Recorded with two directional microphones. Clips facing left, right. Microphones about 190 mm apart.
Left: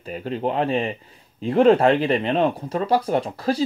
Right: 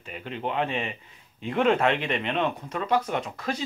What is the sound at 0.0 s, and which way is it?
Speech, 40° left (ahead or behind).